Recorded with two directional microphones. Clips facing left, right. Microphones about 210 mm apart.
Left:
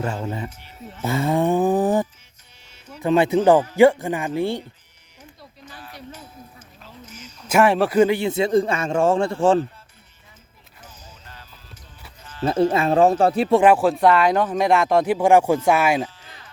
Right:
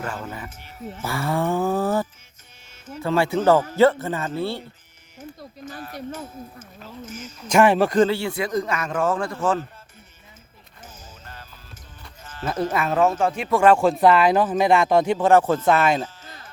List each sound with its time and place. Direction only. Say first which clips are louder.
0.0 s a man's voice: left 5 dB; 25° left (ahead or behind)
0.5 s speech: right 4 dB; 50° right (ahead or behind)
1.0 s a sound: left 4 dB; 20° left (ahead or behind)
2.7 s music: right 5 dB; 50° right (ahead or behind)
3.0 s speech: left 4 dB; 20° left (ahead or behind)
5.4 s speech: right 5 dB; 45° right (ahead or behind)
7.4 s a man's voice: even; 5° left (ahead or behind); by 9.6 s 30° left (ahead or behind)
10.8 s music: right 2 dB; 45° right (ahead or behind)
12.5 s speech: left 5 dB; 25° left (ahead or behind)
13.7 s speech: even; centre (ahead or behind)
16.0 s music: right 2 dB; 45° right (ahead or behind)